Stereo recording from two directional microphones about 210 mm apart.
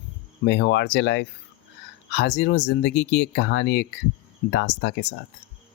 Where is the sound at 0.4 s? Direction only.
55° left (ahead or behind).